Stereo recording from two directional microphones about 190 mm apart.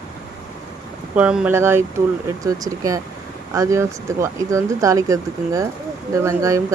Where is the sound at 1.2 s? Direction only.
5° right (ahead or behind).